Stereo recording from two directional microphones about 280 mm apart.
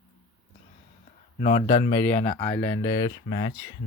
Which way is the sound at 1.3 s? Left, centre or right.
Left.